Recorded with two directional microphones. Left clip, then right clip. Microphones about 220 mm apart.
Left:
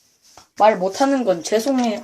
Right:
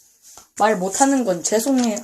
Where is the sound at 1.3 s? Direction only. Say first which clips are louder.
Left 1 dB; 5° right (ahead or behind).